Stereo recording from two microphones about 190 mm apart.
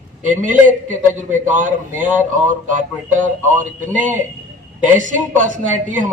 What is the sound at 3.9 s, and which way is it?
A man's voice, 45° right (ahead or behind).